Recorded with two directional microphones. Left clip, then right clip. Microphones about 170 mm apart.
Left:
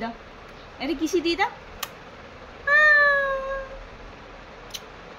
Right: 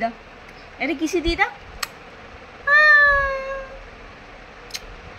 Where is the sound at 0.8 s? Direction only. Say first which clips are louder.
Right 2 dB; 15° right (ahead or behind).